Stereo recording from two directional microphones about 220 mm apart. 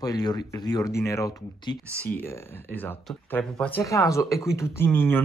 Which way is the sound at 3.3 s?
5° left (ahead or behind).